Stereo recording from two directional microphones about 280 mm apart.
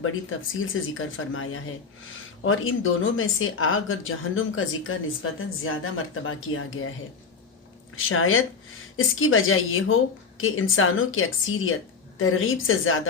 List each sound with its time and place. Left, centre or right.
0.0 s a woman's voice: left
7.9 s a woman's voice: left